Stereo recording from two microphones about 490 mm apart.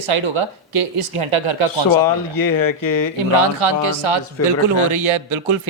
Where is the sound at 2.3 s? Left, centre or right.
Left.